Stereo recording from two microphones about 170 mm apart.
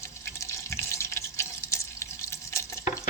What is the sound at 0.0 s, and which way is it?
Water, 15° left (ahead or behind).